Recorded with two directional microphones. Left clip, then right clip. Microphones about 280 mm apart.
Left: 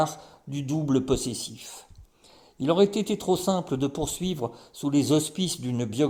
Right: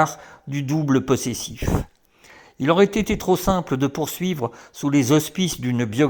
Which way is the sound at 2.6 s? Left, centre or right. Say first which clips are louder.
Right 5 dB; right.